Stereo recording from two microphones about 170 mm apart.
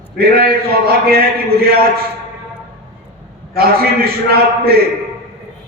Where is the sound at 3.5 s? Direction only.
65° right (ahead or behind).